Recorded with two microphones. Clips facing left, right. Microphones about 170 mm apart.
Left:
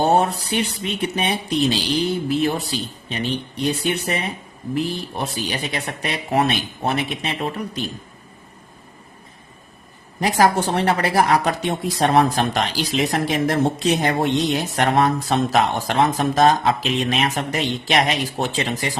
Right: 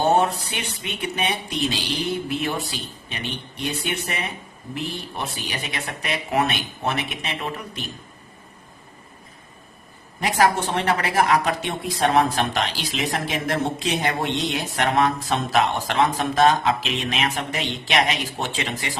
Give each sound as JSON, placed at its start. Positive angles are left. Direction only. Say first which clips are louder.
{"t": 0.0, "sound": "speech", "louder": "left 2 dB", "side_deg": 35}
{"t": 10.2, "sound": "speech", "louder": "left 3 dB", "side_deg": 35}